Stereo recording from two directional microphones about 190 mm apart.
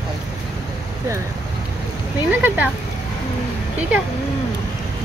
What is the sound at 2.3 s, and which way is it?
Speech, 10° right (ahead or behind).